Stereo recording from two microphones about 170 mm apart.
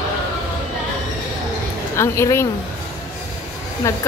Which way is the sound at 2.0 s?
15° left (ahead or behind).